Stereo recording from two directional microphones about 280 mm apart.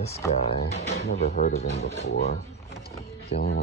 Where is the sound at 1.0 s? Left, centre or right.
Left.